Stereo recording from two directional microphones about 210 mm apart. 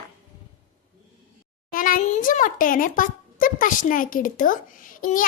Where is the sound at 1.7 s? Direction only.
40° left (ahead or behind).